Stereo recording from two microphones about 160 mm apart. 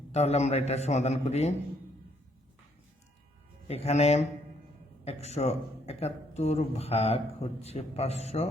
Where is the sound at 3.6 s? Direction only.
40° left (ahead or behind).